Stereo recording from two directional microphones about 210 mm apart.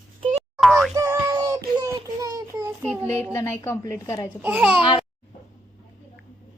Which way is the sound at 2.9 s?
10° left (ahead or behind).